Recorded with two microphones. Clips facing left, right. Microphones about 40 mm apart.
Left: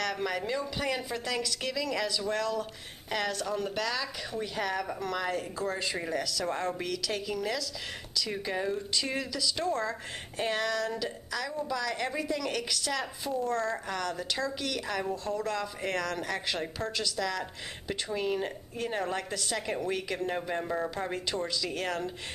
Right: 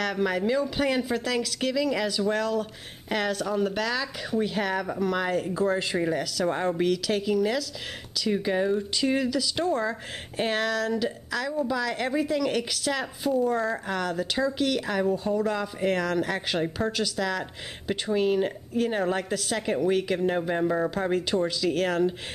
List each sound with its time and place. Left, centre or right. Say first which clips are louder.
0.0 s speech: right 5 dB; centre
0.4 s speech: right 8 dB; centre
0.7 s speech: right 7 dB; centre
8.2 s speech: right 7 dB; centre
10.3 s speech: right 4 dB; right
10.6 s speech: right 5 dB; centre